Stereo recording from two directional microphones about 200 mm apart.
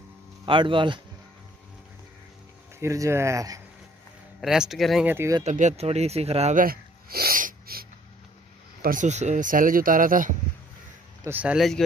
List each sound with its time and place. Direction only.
0.5 s speech: 25° right (ahead or behind)
2.8 s speech: 15° right (ahead or behind)
4.4 s speech: centre (ahead or behind)
5.4 s speech: 35° right (ahead or behind)
8.8 s speech: 40° right (ahead or behind)
11.2 s speech: 5° right (ahead or behind)